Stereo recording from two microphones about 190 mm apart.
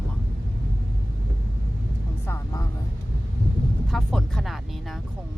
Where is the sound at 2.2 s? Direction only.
15° left (ahead or behind).